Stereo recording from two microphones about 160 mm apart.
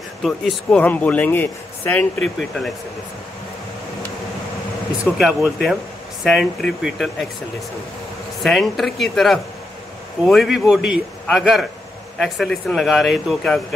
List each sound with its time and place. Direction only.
0.2 s a man's voice: 5° left (ahead or behind)
5.1 s speech: 5° right (ahead or behind)
8.4 s speech: centre (ahead or behind)